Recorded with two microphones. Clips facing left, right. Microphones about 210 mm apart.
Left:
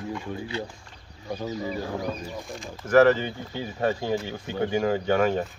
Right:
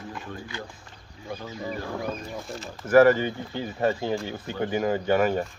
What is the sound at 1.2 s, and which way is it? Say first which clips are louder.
Speech: left 5 dB; 40° left (ahead or behind).